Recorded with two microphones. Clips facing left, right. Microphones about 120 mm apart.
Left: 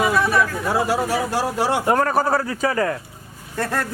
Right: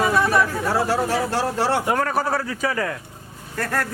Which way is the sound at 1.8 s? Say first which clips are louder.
Left 3 dB; 40° left (ahead or behind).